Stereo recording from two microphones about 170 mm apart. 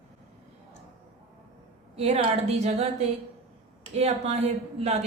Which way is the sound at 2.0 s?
40° right (ahead or behind).